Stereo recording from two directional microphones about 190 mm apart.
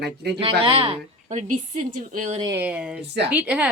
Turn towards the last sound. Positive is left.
turn(degrees=-5)  # may be behind; listen again after turning